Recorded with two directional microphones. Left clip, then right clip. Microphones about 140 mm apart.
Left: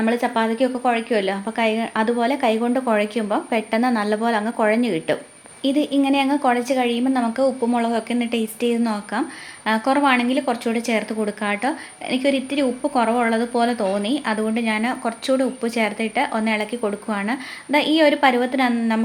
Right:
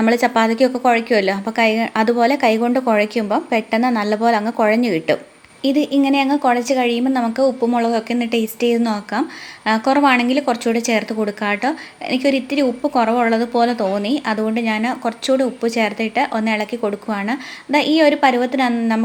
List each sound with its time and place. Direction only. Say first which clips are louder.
0.0 s speech: right 5 dB; 35° right (ahead or behind); by 19.0 s 15° right (ahead or behind)